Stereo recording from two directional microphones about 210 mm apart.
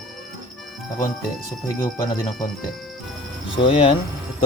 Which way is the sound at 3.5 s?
25° left (ahead or behind).